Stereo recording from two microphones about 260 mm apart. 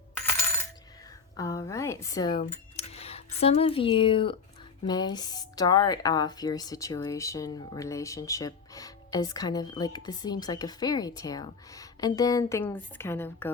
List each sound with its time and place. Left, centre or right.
0.3 s coin: centre
1.4 s speech: centre
2.7 s music: left
3.4 s speech: left